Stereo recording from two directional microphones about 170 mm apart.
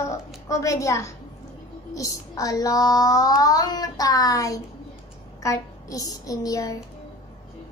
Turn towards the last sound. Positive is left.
turn(degrees=20)  # may be behind; listen again after turning